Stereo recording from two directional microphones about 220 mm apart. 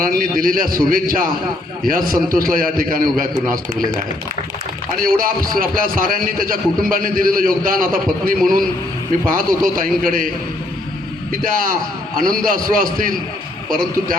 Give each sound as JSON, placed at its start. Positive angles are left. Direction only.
{"t": 0.0, "sound": "a man's voice", "side_deg": -40}
{"t": 4.9, "sound": "a man's voice", "side_deg": -40}
{"t": 11.3, "sound": "a man's voice", "side_deg": -40}